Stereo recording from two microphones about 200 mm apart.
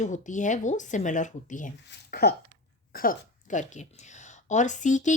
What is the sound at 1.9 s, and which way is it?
Speech, 50° left (ahead or behind).